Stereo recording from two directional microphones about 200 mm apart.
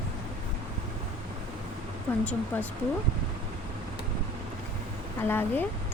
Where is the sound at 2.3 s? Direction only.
10° left (ahead or behind).